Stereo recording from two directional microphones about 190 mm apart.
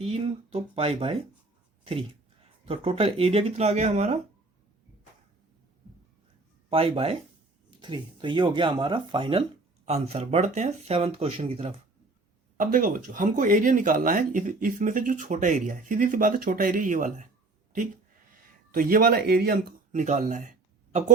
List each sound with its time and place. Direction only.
0.0 s speech: 30° right (ahead or behind)
2.6 s speech: 30° right (ahead or behind)
6.7 s speech: 30° right (ahead or behind)
12.5 s speech: 45° right (ahead or behind)